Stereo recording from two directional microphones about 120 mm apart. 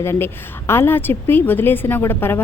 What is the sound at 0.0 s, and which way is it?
A woman's voice, 20° left (ahead or behind).